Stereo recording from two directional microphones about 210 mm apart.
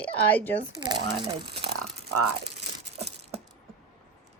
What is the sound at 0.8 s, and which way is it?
Speech, 20° right (ahead or behind).